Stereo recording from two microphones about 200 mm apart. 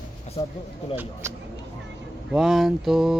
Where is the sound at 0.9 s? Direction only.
10° right (ahead or behind).